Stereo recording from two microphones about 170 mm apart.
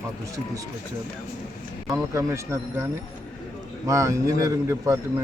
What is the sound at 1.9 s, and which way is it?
Speech, 15° right (ahead or behind).